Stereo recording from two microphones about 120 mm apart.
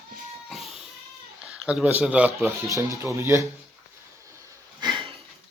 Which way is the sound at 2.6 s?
25° right (ahead or behind).